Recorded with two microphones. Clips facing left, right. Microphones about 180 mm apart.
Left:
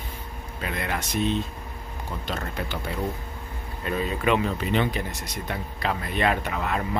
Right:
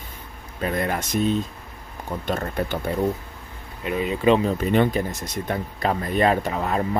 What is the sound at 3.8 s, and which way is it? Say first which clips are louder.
Speech: right 5 dB; 15° right (ahead or behind).